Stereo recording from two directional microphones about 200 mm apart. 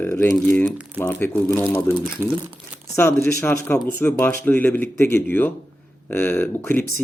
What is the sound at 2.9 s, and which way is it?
Speech, 15° left (ahead or behind).